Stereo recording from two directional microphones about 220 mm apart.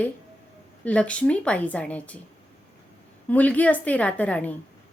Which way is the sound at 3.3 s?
5° left (ahead or behind).